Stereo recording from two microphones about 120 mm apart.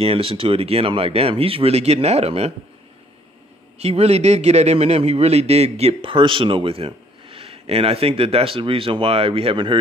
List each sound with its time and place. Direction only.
0.0 s a man's voice: 50° right (ahead or behind)
3.7 s a man's voice: 60° right (ahead or behind)